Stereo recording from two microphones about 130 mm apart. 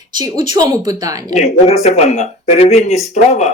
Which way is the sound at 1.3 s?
60° left (ahead or behind).